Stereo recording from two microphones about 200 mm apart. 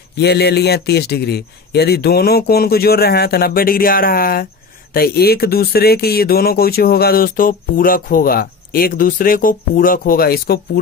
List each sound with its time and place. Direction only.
0.2 s speech: 55° left (ahead or behind)